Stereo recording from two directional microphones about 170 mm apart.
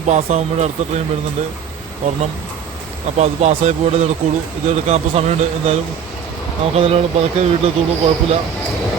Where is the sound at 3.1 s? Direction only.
40° right (ahead or behind).